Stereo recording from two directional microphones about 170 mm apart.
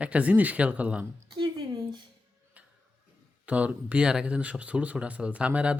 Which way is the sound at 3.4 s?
10° right (ahead or behind).